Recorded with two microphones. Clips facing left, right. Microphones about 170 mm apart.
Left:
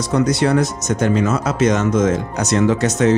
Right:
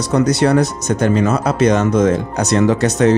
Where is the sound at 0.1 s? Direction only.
35° right (ahead or behind).